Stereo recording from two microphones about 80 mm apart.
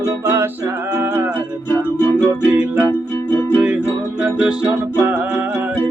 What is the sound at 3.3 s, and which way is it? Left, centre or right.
Music, left.